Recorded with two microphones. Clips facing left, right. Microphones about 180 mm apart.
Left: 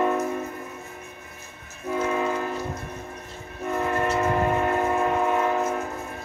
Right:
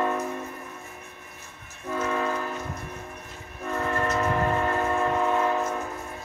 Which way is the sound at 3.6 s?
15° left (ahead or behind).